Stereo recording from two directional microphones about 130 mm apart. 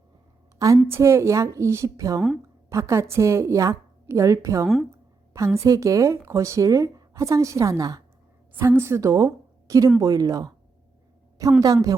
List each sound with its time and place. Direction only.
0.6 s speech: 20° right (ahead or behind)
4.6 s speech: centre (ahead or behind)
5.5 s a woman's voice: 25° right (ahead or behind)
11.6 s speech: 30° right (ahead or behind)